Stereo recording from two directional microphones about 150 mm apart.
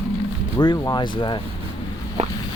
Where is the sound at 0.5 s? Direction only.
25° left (ahead or behind).